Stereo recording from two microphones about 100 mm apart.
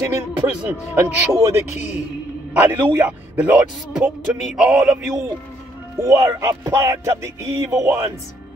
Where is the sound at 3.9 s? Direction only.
5° right (ahead or behind).